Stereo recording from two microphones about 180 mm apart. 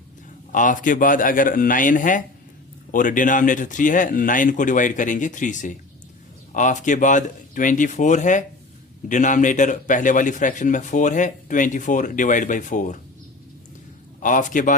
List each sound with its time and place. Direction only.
0.5 s a man's voice: 45° left (ahead or behind)
14.2 s a man's voice: 45° left (ahead or behind)